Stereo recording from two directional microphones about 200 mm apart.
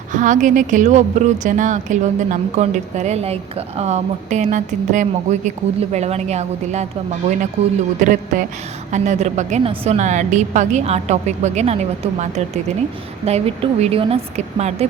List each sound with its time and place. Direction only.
0.1 s a woman's voice: 40° right (ahead or behind)